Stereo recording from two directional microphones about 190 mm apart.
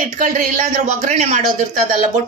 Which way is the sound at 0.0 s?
45° right (ahead or behind).